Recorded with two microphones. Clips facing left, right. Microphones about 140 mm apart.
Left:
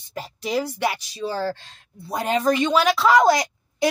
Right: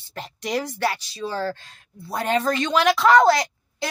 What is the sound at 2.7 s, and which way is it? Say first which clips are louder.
Speech: right 3 dB; centre (ahead or behind).